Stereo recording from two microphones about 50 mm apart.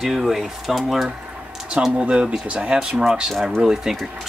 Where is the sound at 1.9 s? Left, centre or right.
Right.